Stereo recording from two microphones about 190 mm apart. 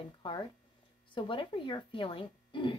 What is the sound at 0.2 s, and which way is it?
A woman's voice, 25° left (ahead or behind).